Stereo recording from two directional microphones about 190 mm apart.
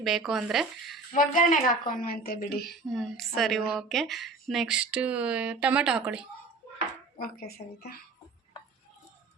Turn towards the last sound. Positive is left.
turn(degrees=55)  # may be behind; listen again after turning